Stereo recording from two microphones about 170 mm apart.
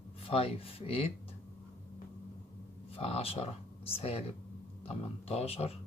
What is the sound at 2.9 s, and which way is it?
Speech, 35° left (ahead or behind).